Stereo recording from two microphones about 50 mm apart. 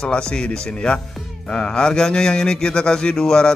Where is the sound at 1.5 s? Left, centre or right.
Centre.